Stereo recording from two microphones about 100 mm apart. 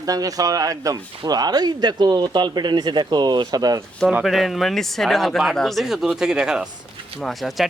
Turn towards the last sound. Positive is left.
turn(degrees=0)  # may be behind; listen again after turning